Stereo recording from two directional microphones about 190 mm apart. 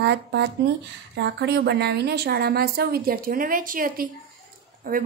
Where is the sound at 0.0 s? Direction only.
60° right (ahead or behind).